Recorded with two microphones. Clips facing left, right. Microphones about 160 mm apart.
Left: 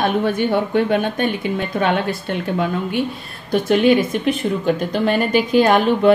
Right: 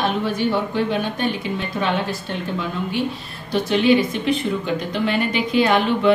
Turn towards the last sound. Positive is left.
turn(degrees=45)  # may be behind; listen again after turning